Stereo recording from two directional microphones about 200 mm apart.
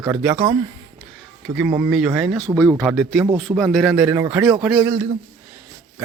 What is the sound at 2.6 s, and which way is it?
A man's voice, 10° left (ahead or behind).